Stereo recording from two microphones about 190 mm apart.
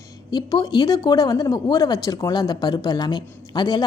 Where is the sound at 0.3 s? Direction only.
20° left (ahead or behind).